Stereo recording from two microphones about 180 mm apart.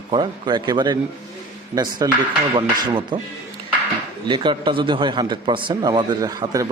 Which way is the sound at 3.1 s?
25° right (ahead or behind).